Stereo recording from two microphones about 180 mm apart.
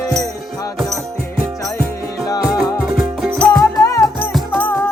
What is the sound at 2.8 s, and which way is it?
Music, 5° right (ahead or behind).